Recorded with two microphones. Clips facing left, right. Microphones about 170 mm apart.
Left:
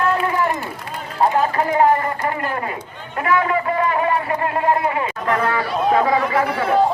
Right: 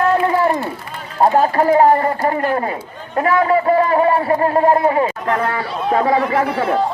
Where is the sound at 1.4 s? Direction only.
35° right (ahead or behind).